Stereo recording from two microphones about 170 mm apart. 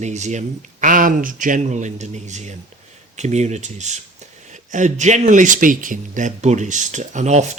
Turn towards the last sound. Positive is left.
turn(degrees=-40)  # may be behind; listen again after turning